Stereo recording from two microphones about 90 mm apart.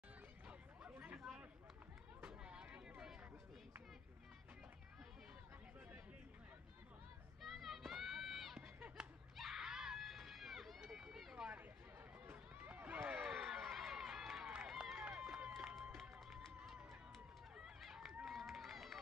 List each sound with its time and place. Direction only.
0.5 s a sound: 15° right (ahead or behind)
2.2 s a sound: 10° right (ahead or behind)
7.4 s run: centre (ahead or behind)
9.4 s screaming: 5° right (ahead or behind)
12.3 s run: 20° right (ahead or behind)
13.2 s run: 5° right (ahead or behind)
15.0 s run: 15° right (ahead or behind)